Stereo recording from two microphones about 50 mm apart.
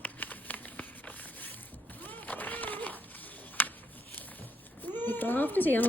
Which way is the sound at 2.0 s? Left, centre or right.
Left.